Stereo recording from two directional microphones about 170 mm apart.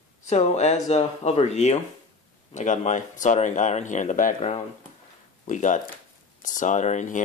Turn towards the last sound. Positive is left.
turn(degrees=45)  # may be behind; listen again after turning